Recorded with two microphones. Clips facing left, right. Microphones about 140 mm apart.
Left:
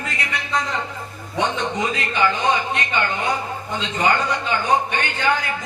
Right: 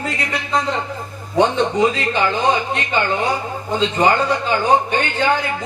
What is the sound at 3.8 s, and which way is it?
Speech, 30° right (ahead or behind).